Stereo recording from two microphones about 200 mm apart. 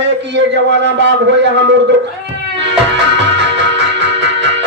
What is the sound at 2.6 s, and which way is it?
Music, 60° right (ahead or behind).